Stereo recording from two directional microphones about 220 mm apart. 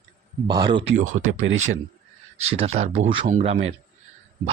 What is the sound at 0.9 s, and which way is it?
Speech, 35° right (ahead or behind).